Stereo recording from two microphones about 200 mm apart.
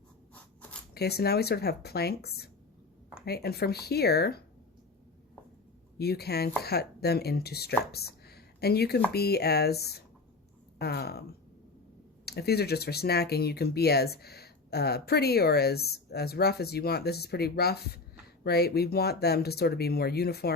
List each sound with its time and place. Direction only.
0.9 s speech: 55° left (ahead or behind)
6.0 s speech: 50° left (ahead or behind)